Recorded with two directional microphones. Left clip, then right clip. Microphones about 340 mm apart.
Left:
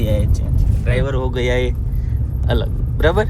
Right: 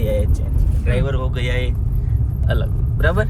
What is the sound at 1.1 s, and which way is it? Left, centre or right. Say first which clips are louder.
Speech: left 5 dB; centre.